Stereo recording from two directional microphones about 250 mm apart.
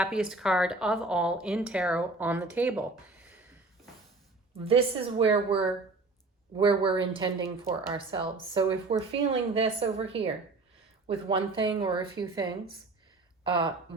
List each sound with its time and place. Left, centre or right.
0.0 s speech: centre
4.5 s speech: right